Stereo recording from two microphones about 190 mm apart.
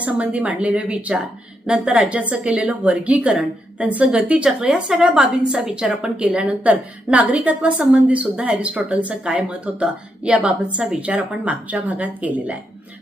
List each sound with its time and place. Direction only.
0.0 s a woman's voice: 5° right (ahead or behind)